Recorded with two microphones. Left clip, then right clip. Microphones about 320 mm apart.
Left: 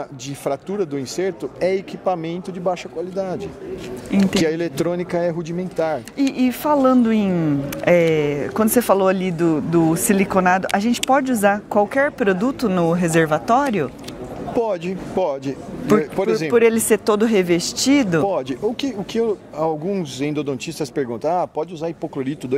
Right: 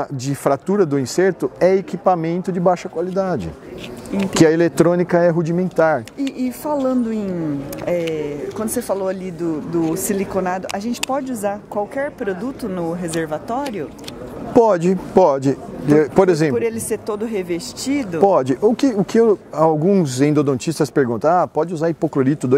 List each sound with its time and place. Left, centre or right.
0.3 s speech: right
6.3 s speech: left
14.5 s speech: right
16.5 s speech: left
18.2 s speech: right